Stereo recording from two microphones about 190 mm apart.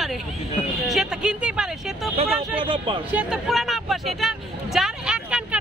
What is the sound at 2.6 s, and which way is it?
Speech, 30° right (ahead or behind).